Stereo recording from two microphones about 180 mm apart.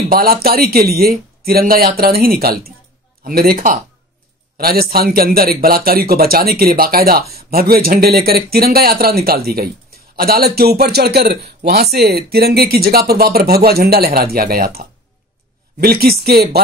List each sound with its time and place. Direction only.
0.1 s a man's voice: 55° right (ahead or behind)